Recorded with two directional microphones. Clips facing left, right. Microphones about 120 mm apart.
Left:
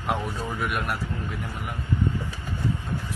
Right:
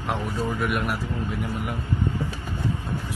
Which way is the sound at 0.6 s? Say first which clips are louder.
Even; centre (ahead or behind).